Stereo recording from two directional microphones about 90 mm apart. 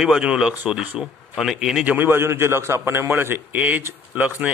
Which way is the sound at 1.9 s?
25° right (ahead or behind).